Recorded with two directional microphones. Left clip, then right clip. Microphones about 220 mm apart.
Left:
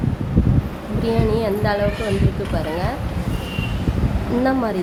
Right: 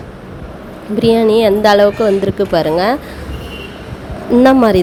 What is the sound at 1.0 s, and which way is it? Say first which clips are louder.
A woman's voice: right 11 dB; 40° right (ahead or behind).